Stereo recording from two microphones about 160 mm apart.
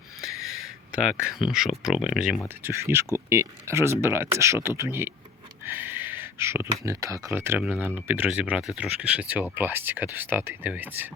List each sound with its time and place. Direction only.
1.4 s speech: centre (ahead or behind)
2.7 s speech: 15° right (ahead or behind)